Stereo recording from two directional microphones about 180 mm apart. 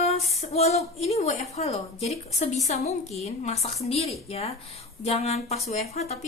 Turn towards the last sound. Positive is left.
turn(degrees=35)  # may be behind; listen again after turning